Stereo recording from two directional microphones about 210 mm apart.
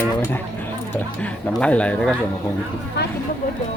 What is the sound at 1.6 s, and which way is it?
Speech, 5° left (ahead or behind).